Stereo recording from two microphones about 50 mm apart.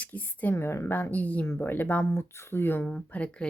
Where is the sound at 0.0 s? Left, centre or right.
Left.